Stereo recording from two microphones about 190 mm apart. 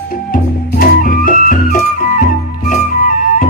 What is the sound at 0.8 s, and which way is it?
Music, 45° left (ahead or behind).